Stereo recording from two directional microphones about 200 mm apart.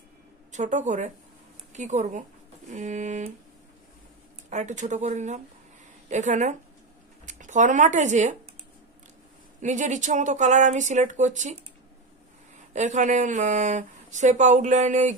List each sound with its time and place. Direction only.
0.5 s speech: 35° right (ahead or behind)
4.5 s speech: 35° right (ahead or behind)
9.6 s speech: 35° right (ahead or behind)
12.5 s speech: 35° right (ahead or behind)